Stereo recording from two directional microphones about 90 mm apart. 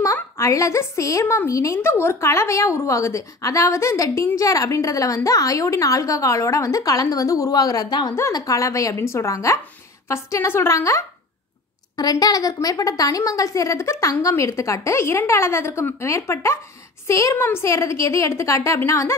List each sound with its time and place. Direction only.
0.0 s a woman's voice: 35° left (ahead or behind)
1.2 s speech: 25° left (ahead or behind)
1.5 s a woman's voice: 35° left (ahead or behind)
12.0 s a woman's voice: 45° left (ahead or behind)